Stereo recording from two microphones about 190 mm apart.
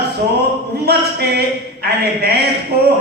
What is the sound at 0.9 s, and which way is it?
A man's voice, 55° right (ahead or behind).